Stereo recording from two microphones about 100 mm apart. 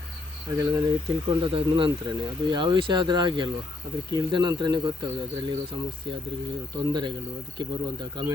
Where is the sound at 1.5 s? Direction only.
60° right (ahead or behind).